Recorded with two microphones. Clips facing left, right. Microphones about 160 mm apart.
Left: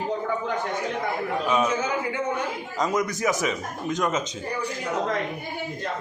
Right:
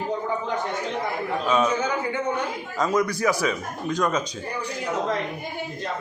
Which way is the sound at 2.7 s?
20° left (ahead or behind).